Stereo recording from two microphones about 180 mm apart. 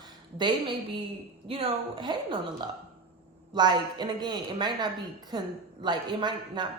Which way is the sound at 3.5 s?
25° right (ahead or behind).